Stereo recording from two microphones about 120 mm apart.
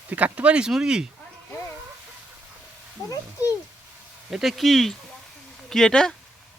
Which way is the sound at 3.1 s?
25° left (ahead or behind).